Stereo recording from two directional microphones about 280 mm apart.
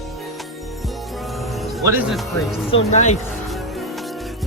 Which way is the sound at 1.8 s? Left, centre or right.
Centre.